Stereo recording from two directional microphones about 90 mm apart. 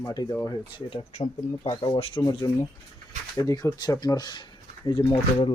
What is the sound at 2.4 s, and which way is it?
Speech, 45° left (ahead or behind).